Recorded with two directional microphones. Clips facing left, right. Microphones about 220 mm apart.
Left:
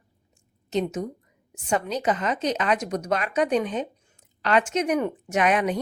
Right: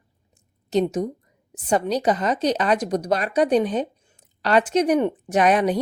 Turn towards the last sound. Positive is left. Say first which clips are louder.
# right 4 dB
turn(degrees=-35)  # may be behind; listen again after turning